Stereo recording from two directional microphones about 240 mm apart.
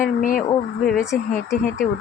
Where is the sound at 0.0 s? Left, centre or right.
Left.